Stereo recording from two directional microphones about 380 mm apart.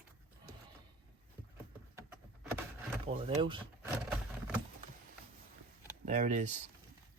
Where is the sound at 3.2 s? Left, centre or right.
Centre.